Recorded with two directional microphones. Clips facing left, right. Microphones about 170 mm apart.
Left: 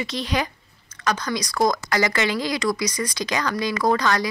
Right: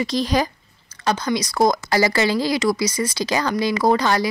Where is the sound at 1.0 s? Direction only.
30° right (ahead or behind).